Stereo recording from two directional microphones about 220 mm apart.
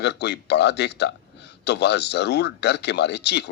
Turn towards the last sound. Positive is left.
turn(degrees=50)  # may be behind; listen again after turning